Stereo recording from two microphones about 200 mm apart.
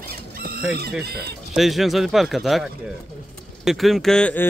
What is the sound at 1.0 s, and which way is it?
Speech, 55° right (ahead or behind).